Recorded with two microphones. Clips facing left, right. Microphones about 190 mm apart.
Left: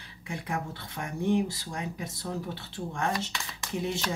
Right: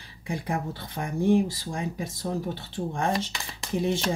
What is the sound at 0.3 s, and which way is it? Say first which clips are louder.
Speech: right 4 dB; 35° right (ahead or behind).